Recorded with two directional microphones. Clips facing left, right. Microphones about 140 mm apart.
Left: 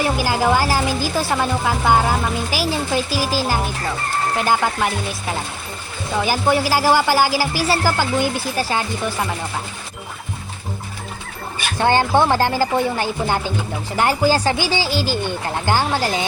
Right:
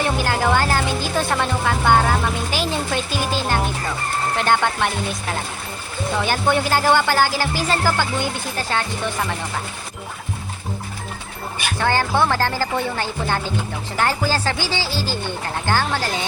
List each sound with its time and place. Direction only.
0.0 s a woman's voice: 5° left (ahead or behind)
6.2 s speech: 5° left (ahead or behind)
11.8 s speech: 20° left (ahead or behind)